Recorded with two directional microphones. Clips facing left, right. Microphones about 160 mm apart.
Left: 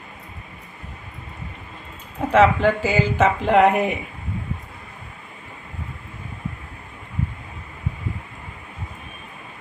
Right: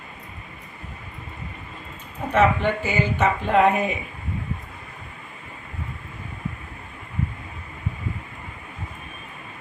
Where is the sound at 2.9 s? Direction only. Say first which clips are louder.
Left 3 dB; 90° left; by 4.0 s 70° left (ahead or behind).